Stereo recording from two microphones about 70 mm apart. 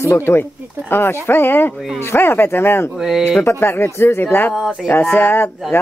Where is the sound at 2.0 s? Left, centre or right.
Left.